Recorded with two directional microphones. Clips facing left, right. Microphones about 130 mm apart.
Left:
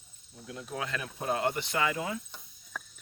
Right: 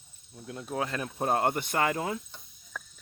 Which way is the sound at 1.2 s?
50° right (ahead or behind).